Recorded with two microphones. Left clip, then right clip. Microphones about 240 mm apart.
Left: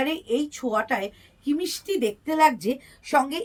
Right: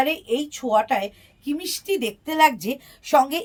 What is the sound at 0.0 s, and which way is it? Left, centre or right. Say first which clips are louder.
A woman's voice: right 3 dB; right.